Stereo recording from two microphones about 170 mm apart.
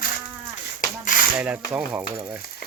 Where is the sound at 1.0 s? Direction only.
55° left (ahead or behind).